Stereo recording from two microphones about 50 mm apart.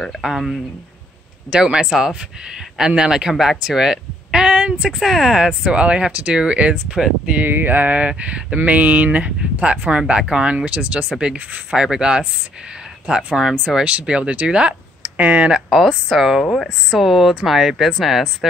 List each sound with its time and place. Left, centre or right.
0.2 s speech: centre
1.5 s speech: centre
4.9 s speech: centre
5.6 s speech: right
7.4 s speech: right
15.7 s speech: centre